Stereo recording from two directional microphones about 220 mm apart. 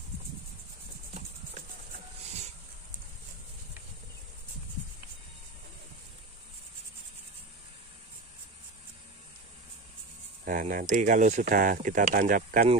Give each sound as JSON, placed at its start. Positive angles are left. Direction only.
{"t": 10.4, "sound": "speech", "side_deg": -35}